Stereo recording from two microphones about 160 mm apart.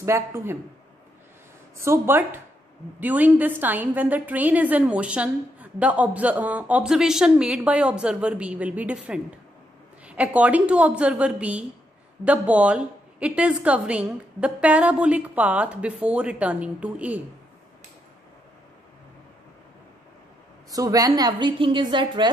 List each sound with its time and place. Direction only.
0.0 s a woman's voice: 15° right (ahead or behind)
1.8 s a woman's voice: 15° right (ahead or behind)
20.7 s a woman's voice: 20° right (ahead or behind)